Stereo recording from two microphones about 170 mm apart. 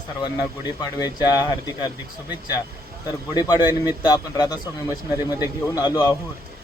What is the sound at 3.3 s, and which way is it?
Speech, 25° left (ahead or behind).